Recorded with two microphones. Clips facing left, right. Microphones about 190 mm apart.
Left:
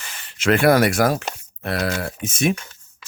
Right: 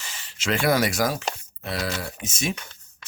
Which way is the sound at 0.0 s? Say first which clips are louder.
Left 9 dB; 60° left (ahead or behind).